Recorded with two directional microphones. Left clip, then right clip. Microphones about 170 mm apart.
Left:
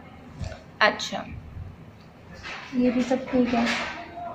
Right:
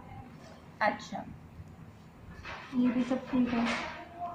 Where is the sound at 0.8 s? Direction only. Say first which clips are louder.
Left 9 dB; 25° left (ahead or behind).